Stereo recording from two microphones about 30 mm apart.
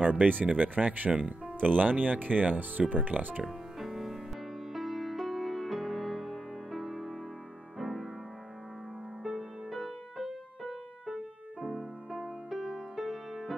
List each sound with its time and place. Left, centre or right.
0.0 s speech: right
0.6 s speech: right
1.6 s speech: right
3.4 s music: centre
9.7 s music: centre